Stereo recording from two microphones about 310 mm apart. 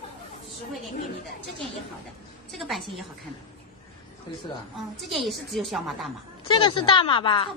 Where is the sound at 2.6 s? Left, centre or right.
Centre.